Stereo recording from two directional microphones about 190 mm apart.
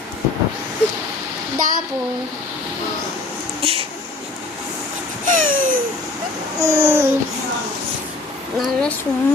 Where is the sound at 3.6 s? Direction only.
30° right (ahead or behind).